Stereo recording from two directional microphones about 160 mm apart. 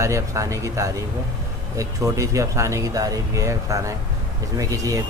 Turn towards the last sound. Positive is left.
turn(degrees=-20)  # may be behind; listen again after turning